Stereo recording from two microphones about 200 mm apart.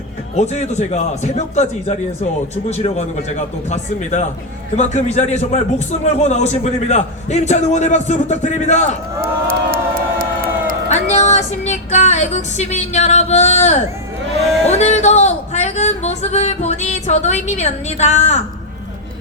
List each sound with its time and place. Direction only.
0.3 s a man's voice: 35° left (ahead or behind)
9.2 s crowd: 45° right (ahead or behind)
10.8 s a man's voice: 35° left (ahead or behind)